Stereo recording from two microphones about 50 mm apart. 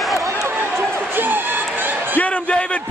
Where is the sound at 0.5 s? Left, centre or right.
Right.